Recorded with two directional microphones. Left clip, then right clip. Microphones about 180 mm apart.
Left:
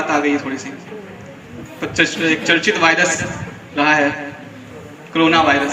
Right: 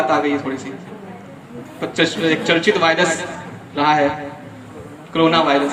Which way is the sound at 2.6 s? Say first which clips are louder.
Even; 50° right (ahead or behind).